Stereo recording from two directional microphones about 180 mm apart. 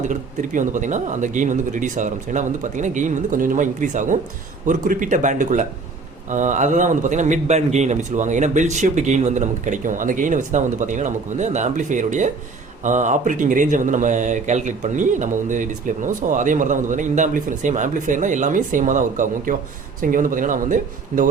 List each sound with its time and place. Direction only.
0.0 s speech: 45° right (ahead or behind)